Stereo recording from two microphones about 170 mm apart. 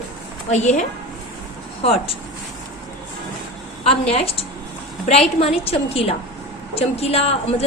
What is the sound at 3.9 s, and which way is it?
A woman's voice, 35° left (ahead or behind).